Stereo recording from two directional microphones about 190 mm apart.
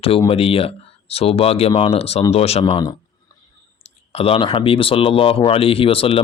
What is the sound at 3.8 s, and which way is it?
Speech, 30° left (ahead or behind).